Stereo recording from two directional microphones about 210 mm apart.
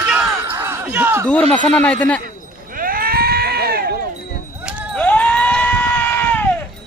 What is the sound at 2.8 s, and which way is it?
Sheep, 45° right (ahead or behind).